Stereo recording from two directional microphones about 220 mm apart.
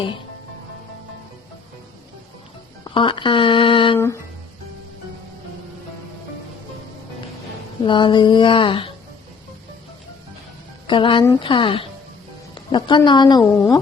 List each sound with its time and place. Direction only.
2.8 s a sound: 20° left (ahead or behind)
3.9 s speech: 10° left (ahead or behind)
7.9 s a woman's voice: 20° left (ahead or behind)
10.8 s a woman's voice: 20° left (ahead or behind)